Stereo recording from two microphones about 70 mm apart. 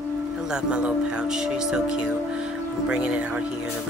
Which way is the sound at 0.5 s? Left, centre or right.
Centre.